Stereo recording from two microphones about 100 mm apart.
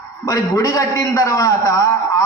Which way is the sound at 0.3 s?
35° left (ahead or behind).